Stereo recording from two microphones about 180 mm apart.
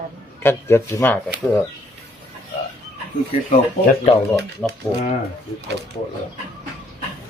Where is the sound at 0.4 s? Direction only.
15° left (ahead or behind).